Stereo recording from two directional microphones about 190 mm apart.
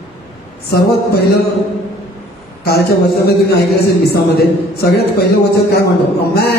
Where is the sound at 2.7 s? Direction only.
55° left (ahead or behind).